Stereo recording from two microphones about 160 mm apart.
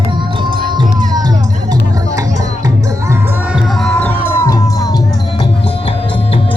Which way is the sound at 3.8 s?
10° left (ahead or behind).